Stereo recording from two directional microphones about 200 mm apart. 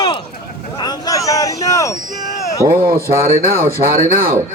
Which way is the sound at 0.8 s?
20° left (ahead or behind).